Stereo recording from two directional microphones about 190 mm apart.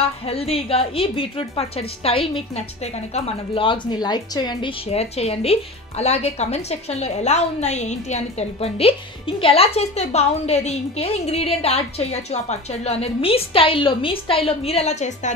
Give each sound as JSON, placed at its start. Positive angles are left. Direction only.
{"t": 0.3, "sound": "a woman's voice", "side_deg": 30}